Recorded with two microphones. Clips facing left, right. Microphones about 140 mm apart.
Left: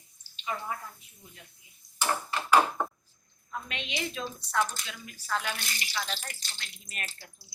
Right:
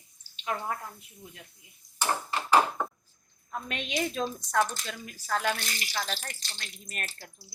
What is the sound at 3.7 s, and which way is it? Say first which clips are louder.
A woman's voice: right 6 dB; 45° right (ahead or behind).